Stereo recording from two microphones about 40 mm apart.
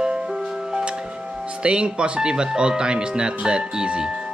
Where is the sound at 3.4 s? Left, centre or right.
Right.